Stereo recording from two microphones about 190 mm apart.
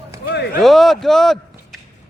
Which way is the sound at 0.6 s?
Centre (ahead or behind).